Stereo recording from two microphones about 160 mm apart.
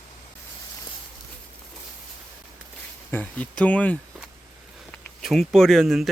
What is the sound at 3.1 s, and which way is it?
Speech, 10° left (ahead or behind).